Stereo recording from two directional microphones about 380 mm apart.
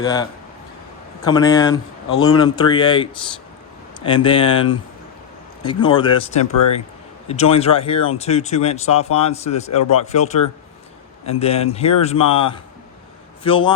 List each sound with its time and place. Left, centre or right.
0.0 s speech: centre
1.3 s speech: centre
4.1 s speech: centre